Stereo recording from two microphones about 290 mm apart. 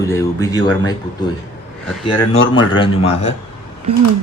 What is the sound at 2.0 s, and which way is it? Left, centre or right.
Speech, centre.